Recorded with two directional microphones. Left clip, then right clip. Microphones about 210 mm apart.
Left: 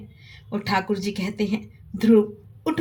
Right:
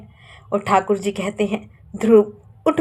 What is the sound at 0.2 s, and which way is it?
A woman's voice, 15° right (ahead or behind).